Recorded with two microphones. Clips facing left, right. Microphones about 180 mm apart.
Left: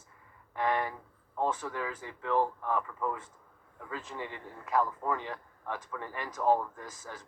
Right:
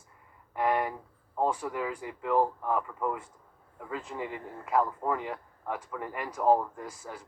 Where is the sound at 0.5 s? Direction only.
10° right (ahead or behind).